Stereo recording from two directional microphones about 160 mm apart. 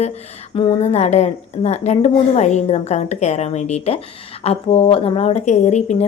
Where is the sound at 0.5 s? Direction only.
35° left (ahead or behind).